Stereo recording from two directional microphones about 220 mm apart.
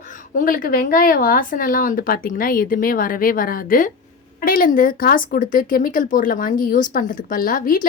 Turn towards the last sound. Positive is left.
turn(degrees=40)  # may be behind; listen again after turning